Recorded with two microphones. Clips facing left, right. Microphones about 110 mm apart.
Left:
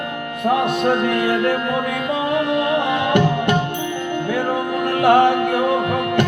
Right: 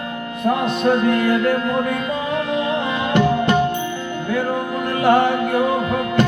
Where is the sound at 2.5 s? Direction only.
55° left (ahead or behind).